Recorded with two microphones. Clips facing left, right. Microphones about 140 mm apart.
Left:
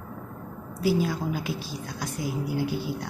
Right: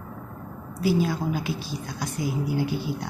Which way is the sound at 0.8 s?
5° left (ahead or behind).